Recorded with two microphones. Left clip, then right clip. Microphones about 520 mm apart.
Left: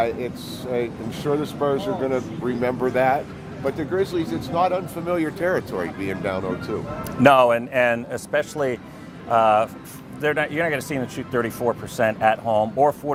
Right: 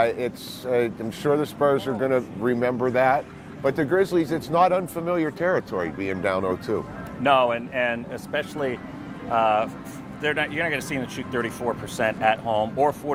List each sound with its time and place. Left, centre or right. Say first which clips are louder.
0.0 s speech: right 1 dB; right
7.2 s speech: left 5 dB; left